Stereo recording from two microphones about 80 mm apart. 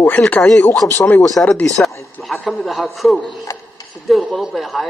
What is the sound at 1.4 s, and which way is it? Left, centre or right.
Speech, left.